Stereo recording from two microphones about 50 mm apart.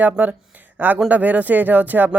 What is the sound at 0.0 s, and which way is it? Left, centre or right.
Speech, right.